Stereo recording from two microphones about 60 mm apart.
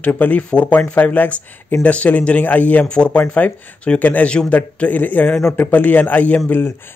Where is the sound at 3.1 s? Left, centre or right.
Left.